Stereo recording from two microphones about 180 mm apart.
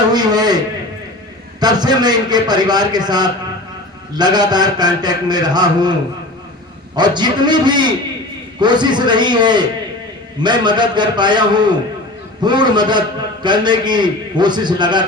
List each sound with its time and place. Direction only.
0.1 s a sound: 20° right (ahead or behind)
1.6 s a man's voice: 25° right (ahead or behind)
6.9 s a man's voice: 25° right (ahead or behind)